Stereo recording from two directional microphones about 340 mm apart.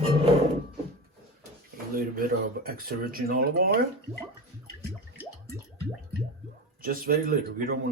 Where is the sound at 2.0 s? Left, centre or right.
Right.